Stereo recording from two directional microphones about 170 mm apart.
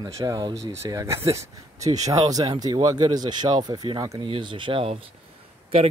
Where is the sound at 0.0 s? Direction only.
20° right (ahead or behind).